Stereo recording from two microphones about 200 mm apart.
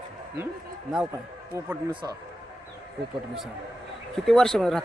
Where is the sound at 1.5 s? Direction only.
15° right (ahead or behind).